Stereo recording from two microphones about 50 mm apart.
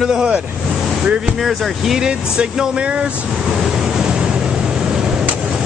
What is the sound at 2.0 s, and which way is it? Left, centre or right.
Speech, centre.